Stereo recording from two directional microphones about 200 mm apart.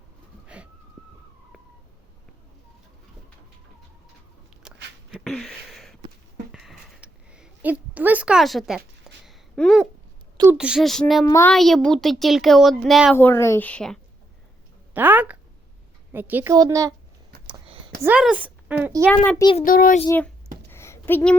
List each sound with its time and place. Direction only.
0.4 s a sound: 5° right (ahead or behind)
4.6 s a sound: 5° right (ahead or behind)
10.3 s a woman's voice: 10° right (ahead or behind)
11.3 s a woman's voice: 15° left (ahead or behind)
11.5 s speech: centre (ahead or behind)
13.1 s a woman's voice: 10° left (ahead or behind)
14.9 s a child's voice: 10° right (ahead or behind)
17.5 s a sound: 25° right (ahead or behind)
18.0 s a woman's voice: 5° right (ahead or behind)
19.0 s a woman's voice: 5° left (ahead or behind)
19.4 s a child's voice: 25° left (ahead or behind)
19.6 s a child's voice: 45° left (ahead or behind)
20.1 s a woman's voice: 10° left (ahead or behind)
20.7 s a sound: 15° left (ahead or behind)